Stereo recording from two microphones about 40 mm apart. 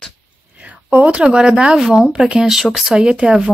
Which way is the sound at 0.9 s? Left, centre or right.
Right.